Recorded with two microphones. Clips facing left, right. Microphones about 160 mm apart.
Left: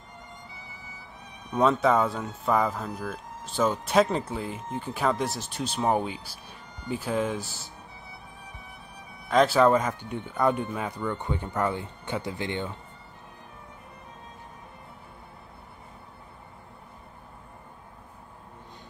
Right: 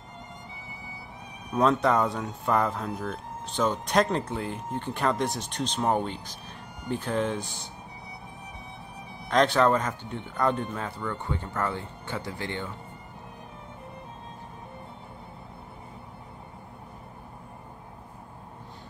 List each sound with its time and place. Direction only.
1.5 s speech: centre (ahead or behind)
9.3 s speech: 5° left (ahead or behind); by 12.7 s 20° left (ahead or behind)